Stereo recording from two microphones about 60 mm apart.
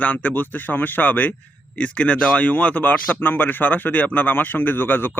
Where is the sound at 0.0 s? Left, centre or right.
Left.